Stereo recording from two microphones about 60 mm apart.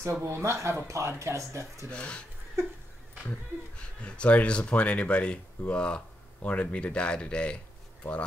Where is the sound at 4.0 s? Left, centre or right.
Left.